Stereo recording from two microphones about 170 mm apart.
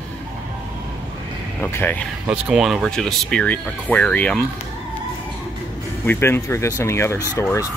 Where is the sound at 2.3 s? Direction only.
5° right (ahead or behind).